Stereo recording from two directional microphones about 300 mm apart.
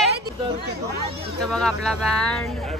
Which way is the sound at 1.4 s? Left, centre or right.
Centre.